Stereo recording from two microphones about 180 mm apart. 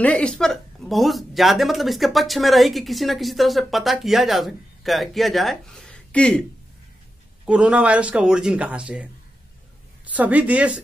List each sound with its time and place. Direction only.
0.0 s speech: 5° left (ahead or behind)
7.4 s a woman's voice: 5° right (ahead or behind)